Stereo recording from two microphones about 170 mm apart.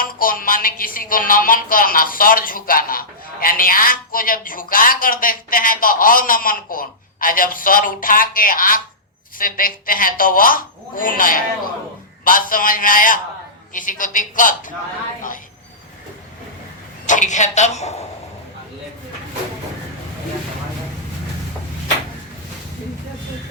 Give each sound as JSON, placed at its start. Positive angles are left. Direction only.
{"t": 0.0, "sound": "a man's voice", "side_deg": 55}
{"t": 17.1, "sound": "a man's voice", "side_deg": 45}